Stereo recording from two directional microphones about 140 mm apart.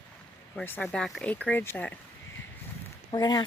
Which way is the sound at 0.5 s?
10° left (ahead or behind).